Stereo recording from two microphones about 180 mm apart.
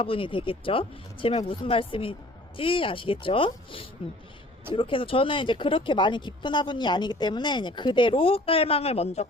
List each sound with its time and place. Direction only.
0.0 s speech: 30° left (ahead or behind)